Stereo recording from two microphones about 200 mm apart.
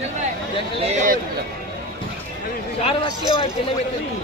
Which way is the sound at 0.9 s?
35° right (ahead or behind).